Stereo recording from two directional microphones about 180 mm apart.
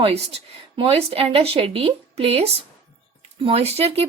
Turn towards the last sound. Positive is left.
turn(degrees=-35)  # may be behind; listen again after turning